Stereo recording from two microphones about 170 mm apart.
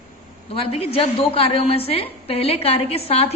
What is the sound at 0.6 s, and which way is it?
A woman's voice, 35° left (ahead or behind).